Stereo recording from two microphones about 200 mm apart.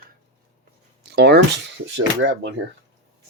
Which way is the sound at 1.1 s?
55° right (ahead or behind).